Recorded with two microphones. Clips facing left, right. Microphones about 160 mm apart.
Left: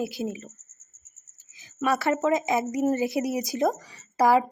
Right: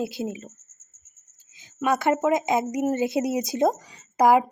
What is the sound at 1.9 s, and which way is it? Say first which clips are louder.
A woman's voice: right 2 dB; 20° right (ahead or behind).